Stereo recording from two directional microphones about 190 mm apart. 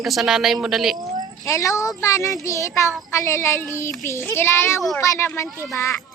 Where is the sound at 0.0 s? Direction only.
Centre (ahead or behind).